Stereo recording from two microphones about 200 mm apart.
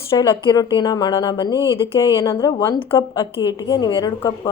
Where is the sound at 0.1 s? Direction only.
20° left (ahead or behind).